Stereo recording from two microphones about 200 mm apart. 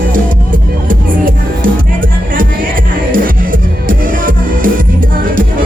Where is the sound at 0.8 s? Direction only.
45° right (ahead or behind).